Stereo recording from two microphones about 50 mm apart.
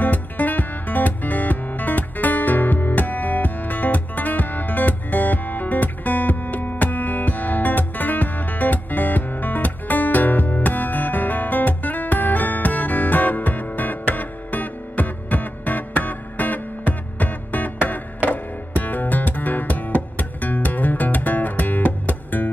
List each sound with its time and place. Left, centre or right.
0.0 s music: left